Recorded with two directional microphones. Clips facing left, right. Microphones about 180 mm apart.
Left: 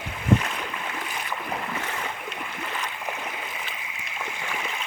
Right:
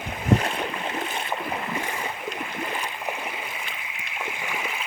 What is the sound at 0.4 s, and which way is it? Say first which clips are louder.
Boat: right 4 dB; 30° right (ahead or behind).